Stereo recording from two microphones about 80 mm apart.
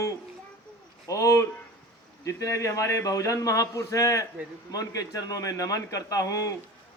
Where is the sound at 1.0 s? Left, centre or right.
Left.